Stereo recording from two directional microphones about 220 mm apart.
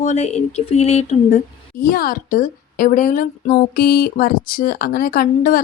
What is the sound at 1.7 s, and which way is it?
Speech, 40° left (ahead or behind).